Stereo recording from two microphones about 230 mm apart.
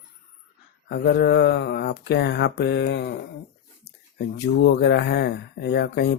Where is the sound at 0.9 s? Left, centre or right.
Left.